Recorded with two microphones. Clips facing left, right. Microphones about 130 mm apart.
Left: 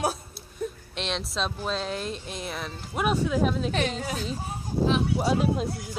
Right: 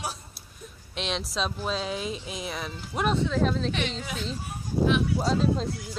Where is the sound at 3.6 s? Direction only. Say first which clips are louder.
Left 3 dB; 45° left (ahead or behind).